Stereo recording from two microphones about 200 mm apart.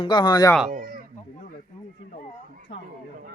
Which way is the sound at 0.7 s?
45° right (ahead or behind).